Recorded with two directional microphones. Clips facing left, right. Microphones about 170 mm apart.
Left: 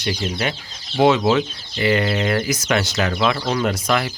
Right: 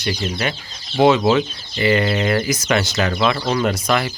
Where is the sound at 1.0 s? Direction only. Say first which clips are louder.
Right 1 dB; 5° right (ahead or behind).